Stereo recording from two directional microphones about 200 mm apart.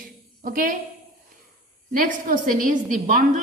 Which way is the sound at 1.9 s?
45° right (ahead or behind).